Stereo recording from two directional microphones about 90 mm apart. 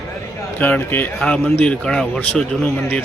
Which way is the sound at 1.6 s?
5° left (ahead or behind).